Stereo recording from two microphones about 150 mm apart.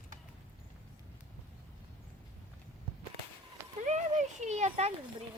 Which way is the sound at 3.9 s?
50° right (ahead or behind).